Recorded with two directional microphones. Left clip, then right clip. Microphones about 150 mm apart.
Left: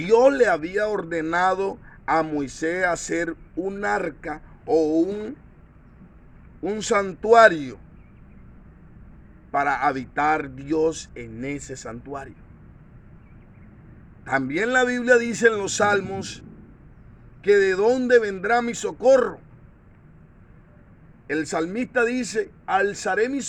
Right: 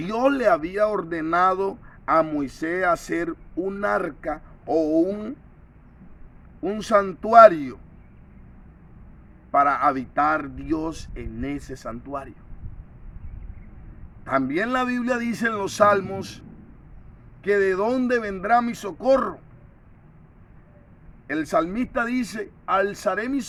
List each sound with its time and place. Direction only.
0.0 s speech: 25° right (ahead or behind)
6.7 s speech: 25° right (ahead or behind)
9.5 s speech: 30° right (ahead or behind)
14.3 s speech: 30° right (ahead or behind)
17.4 s speech: 30° right (ahead or behind)
21.2 s speech: 30° right (ahead or behind)